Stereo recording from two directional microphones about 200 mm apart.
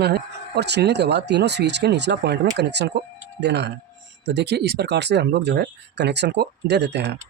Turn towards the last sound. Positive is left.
turn(degrees=-60)  # may be behind; listen again after turning